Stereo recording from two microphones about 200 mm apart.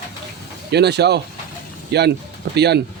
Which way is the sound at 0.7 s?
55° right (ahead or behind).